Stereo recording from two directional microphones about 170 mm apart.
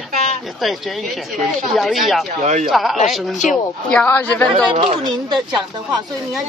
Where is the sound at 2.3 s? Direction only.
45° right (ahead or behind).